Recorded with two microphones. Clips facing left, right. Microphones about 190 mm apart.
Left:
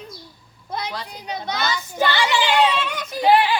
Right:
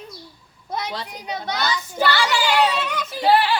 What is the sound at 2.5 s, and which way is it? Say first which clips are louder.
Speech: left 1 dB; 5° right (ahead or behind).